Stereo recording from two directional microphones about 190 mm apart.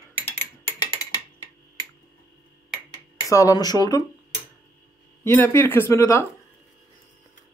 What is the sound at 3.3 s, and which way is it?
Speech, 20° left (ahead or behind).